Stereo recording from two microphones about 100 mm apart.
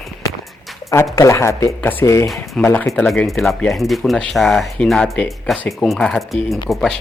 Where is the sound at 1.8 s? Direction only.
20° left (ahead or behind).